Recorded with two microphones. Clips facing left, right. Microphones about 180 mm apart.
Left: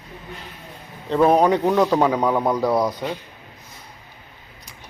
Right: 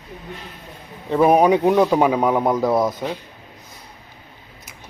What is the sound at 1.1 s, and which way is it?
A man's voice, 10° right (ahead or behind).